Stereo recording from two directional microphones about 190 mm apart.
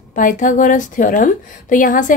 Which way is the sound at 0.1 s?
45° left (ahead or behind).